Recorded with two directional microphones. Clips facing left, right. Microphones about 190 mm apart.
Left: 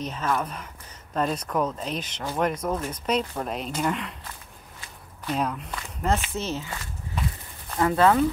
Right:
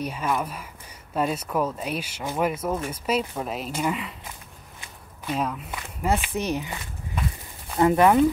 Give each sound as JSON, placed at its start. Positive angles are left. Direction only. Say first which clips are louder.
{"t": 0.0, "sound": "speech", "louder": "right 1 dB", "side_deg": -10}
{"t": 5.2, "sound": "speech", "louder": "even", "side_deg": 0}